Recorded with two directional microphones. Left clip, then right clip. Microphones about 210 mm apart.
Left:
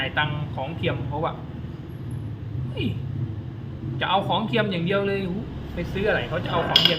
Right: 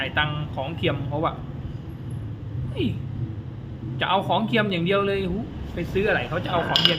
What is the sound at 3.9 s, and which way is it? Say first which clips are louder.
Speech: right 1 dB; 30° right (ahead or behind).